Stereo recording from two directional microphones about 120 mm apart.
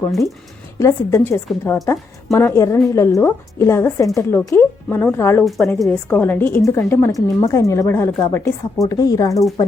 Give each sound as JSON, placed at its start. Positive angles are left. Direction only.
{"t": 0.1, "sound": "a woman's voice", "side_deg": 0}
{"t": 0.8, "sound": "a woman's voice", "side_deg": 25}
{"t": 5.4, "sound": "a woman's voice", "side_deg": 0}
{"t": 5.9, "sound": "a woman's voice", "side_deg": 15}
{"t": 8.9, "sound": "a woman's voice", "side_deg": 30}